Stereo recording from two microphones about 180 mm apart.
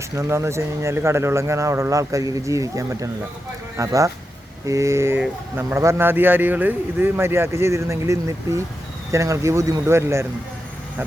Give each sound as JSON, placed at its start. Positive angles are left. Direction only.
{"t": 0.2, "sound": "a man's voice", "side_deg": -15}